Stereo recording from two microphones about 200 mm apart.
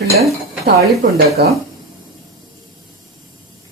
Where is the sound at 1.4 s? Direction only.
55° right (ahead or behind).